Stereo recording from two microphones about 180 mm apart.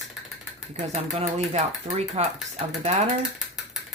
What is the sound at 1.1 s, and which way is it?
Speech, 40° right (ahead or behind).